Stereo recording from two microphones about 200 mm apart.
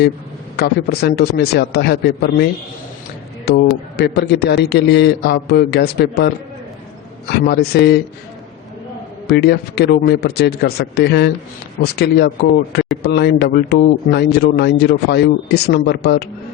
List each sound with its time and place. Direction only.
0.5 s speech: 50° left (ahead or behind)
9.2 s speech: 55° left (ahead or behind)